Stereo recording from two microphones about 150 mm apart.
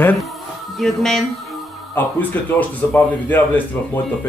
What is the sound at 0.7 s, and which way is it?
Speech, centre (ahead or behind).